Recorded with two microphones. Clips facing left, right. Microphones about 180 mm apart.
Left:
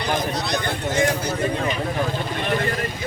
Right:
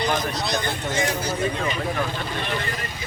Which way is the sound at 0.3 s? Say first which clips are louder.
Left 1 dB; 60° left (ahead or behind).